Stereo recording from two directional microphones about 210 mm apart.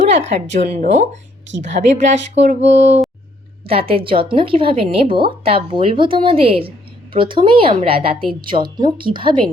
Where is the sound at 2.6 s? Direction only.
60° right (ahead or behind).